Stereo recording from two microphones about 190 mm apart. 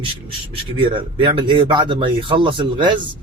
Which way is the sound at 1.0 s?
25° right (ahead or behind).